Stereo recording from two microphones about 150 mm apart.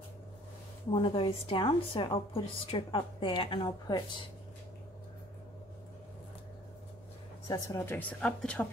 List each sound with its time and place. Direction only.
0.9 s a woman's voice: 35° left (ahead or behind)
7.4 s a woman's voice: 25° left (ahead or behind); by 8.6 s 5° left (ahead or behind)